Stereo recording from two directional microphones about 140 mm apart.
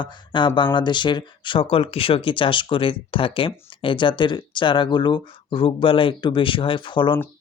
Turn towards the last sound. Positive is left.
turn(degrees=35)  # may be behind; listen again after turning